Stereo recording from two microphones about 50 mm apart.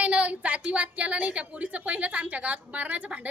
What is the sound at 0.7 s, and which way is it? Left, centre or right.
A woman's voice, right.